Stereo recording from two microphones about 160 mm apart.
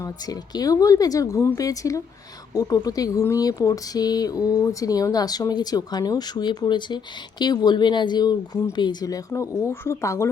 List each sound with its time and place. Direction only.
0.0 s speech: 25° left (ahead or behind)